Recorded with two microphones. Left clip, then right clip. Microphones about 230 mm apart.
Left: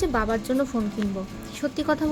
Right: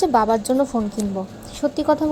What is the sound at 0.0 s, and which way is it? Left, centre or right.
Speech, centre.